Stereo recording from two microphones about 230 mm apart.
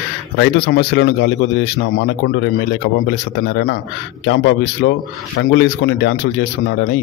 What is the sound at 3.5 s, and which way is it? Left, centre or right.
Speech, left.